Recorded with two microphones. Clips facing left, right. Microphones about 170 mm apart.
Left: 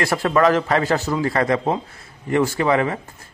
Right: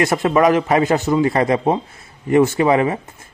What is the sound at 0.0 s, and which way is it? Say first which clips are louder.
A man's voice: right 3 dB; 20° right (ahead or behind).